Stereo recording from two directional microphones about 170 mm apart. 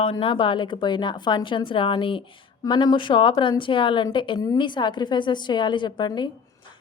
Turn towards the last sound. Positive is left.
turn(degrees=25)  # may be behind; listen again after turning